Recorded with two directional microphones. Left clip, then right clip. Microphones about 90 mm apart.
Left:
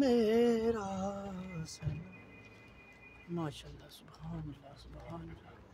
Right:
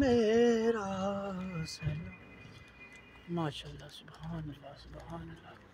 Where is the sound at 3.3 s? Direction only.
15° right (ahead or behind).